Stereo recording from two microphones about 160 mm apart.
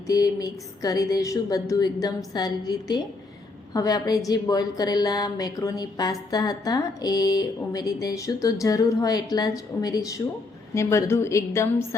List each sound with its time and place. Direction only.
0.1 s a woman's voice: 25° left (ahead or behind)